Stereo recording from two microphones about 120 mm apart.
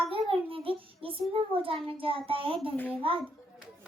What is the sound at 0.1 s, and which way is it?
Child singing, 50° right (ahead or behind).